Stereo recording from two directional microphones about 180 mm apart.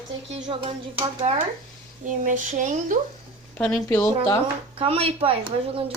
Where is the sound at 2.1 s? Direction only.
45° right (ahead or behind).